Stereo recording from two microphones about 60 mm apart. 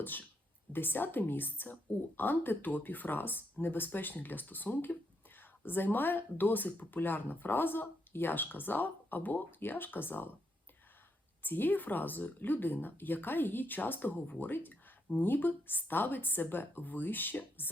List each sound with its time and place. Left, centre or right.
0.0 s speech: left
11.4 s speech: left